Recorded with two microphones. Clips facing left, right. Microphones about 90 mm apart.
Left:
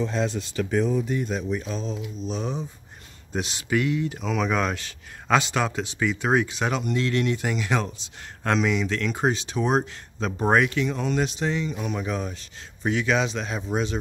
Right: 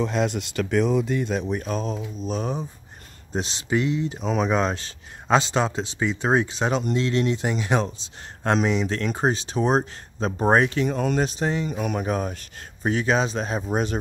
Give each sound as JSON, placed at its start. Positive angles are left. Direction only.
{"t": 0.0, "sound": "speech", "side_deg": -70}
{"t": 3.3, "sound": "speech", "side_deg": -30}